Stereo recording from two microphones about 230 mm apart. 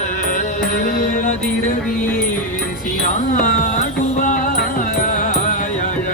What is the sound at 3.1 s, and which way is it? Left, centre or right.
Music, left.